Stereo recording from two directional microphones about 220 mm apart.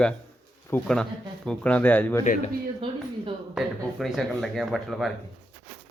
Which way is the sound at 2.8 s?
25° right (ahead or behind).